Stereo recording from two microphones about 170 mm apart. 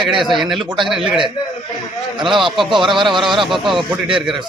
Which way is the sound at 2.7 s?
30° right (ahead or behind).